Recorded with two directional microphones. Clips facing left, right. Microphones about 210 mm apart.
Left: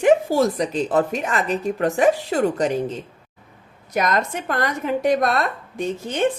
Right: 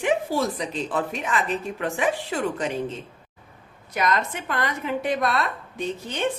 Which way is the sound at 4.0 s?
45° left (ahead or behind).